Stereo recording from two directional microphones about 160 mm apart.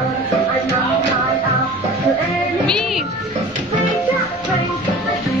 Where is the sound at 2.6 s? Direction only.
5° left (ahead or behind).